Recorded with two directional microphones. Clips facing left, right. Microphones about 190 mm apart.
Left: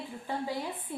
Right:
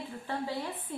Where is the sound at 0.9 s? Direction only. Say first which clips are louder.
Even; 10° left (ahead or behind).